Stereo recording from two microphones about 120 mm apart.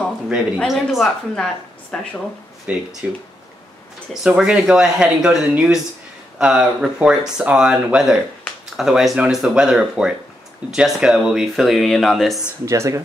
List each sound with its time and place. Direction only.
0.7 s speech: centre (ahead or behind)
2.6 s speech: 10° right (ahead or behind)
4.1 s speech: 5° right (ahead or behind)
12.6 s speech: 25° right (ahead or behind)